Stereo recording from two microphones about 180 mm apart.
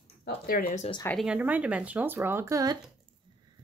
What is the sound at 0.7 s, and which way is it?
Speech, 40° left (ahead or behind).